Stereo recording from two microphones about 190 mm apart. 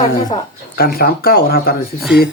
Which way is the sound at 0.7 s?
50° left (ahead or behind).